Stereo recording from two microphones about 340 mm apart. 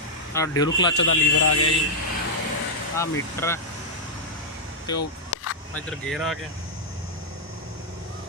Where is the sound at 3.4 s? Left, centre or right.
Centre.